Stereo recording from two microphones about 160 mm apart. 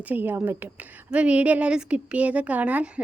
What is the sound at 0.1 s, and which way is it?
A woman's voice, 10° right (ahead or behind).